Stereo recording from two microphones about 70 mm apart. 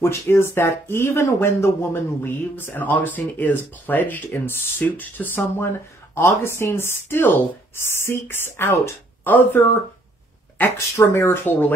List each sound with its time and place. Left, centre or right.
0.0 s speech: left
9.2 s speech: left
11.0 s speech: left